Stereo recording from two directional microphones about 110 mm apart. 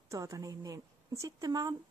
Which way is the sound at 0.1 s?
30° right (ahead or behind).